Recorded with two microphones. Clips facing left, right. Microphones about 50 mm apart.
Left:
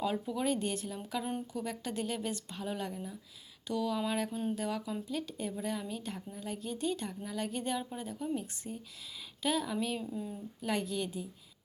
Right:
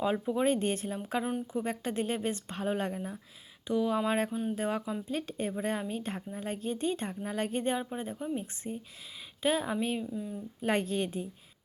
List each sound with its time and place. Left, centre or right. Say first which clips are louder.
0.0 s speech: right 5 dB; right
3.7 s speech: right 5 dB; right
10.0 s speech: right 2 dB; centre
10.6 s speech: right 5 dB; right